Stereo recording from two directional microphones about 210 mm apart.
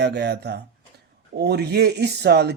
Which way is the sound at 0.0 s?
50° right (ahead or behind).